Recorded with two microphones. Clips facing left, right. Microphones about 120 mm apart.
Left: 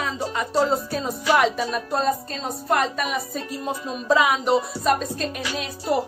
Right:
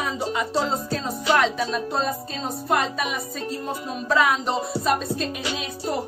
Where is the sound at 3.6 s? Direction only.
15° left (ahead or behind).